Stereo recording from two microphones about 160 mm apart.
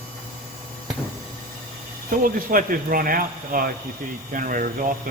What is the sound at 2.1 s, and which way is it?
Speech, 60° right (ahead or behind).